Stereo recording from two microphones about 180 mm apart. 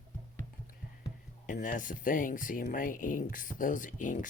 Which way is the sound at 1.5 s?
45° left (ahead or behind).